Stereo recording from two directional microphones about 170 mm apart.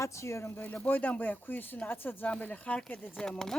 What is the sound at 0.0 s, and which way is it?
Speech, 15° left (ahead or behind).